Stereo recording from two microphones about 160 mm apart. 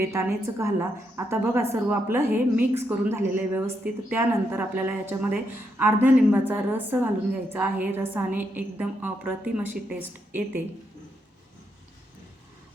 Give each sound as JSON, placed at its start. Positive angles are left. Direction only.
{"t": 0.0, "sound": "a woman's voice", "side_deg": -15}